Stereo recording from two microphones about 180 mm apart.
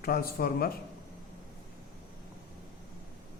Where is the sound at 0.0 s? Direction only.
55° left (ahead or behind).